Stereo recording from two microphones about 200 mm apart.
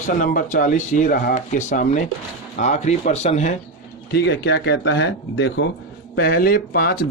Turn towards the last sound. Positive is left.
turn(degrees=50)  # may be behind; listen again after turning